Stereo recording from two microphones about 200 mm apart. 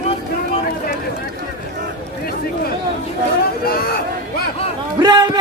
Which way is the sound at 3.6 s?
50° left (ahead or behind).